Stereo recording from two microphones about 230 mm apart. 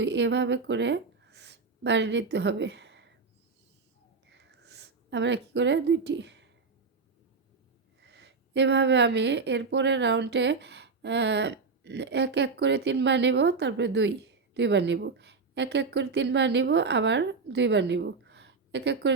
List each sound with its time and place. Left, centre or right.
0.0 s speech: right
4.3 s a sound: right
8.0 s speech: right